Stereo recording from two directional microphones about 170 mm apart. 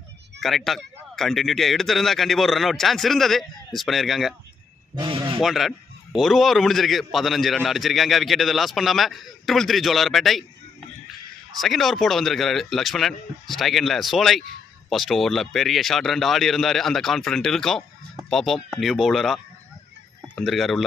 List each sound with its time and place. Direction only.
0.4 s a man's voice: centre (ahead or behind)
4.9 s a sound: 30° right (ahead or behind)
5.4 s a man's voice: centre (ahead or behind)
11.6 s a man's voice: centre (ahead or behind)